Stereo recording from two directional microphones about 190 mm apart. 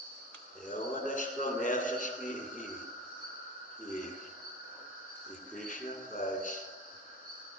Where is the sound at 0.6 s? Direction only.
45° left (ahead or behind).